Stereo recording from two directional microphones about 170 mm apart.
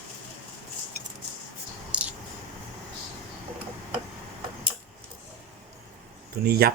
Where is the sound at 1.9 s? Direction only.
5° right (ahead or behind).